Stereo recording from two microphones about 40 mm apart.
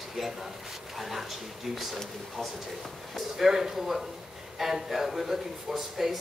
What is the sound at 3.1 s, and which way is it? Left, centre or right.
Speech, centre.